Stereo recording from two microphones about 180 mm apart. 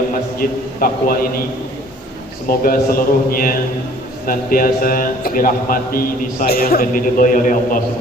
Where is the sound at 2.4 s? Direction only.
50° left (ahead or behind).